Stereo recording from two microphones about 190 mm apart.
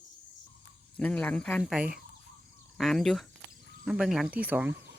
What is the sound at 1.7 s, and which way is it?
Speech, 5° right (ahead or behind).